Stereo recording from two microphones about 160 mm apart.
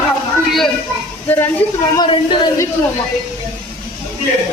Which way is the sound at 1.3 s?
10° left (ahead or behind).